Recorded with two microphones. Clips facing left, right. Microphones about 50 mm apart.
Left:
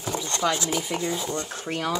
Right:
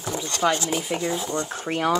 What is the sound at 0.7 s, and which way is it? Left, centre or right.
Speech, centre.